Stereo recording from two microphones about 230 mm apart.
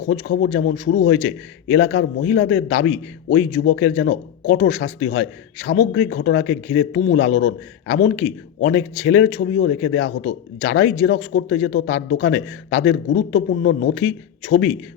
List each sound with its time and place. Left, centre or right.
0.1 s speech: left